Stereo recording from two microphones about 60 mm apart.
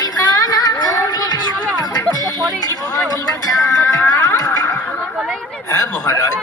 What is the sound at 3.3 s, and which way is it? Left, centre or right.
Music, left.